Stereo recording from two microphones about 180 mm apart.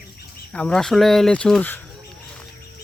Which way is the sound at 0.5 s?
5° left (ahead or behind).